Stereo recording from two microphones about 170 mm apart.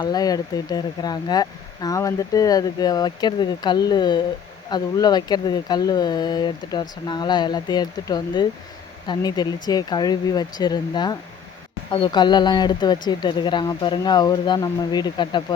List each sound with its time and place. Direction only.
0.0 s speech: 20° left (ahead or behind)